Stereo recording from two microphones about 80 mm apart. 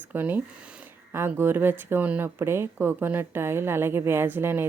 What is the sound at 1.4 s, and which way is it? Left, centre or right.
A woman's voice, right.